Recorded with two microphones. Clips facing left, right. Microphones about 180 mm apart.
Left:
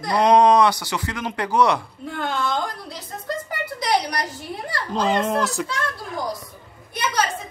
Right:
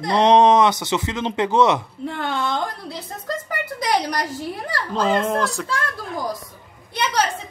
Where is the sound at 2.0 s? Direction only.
60° right (ahead or behind).